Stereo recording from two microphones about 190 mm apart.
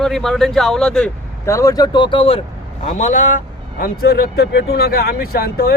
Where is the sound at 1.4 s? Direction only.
15° left (ahead or behind).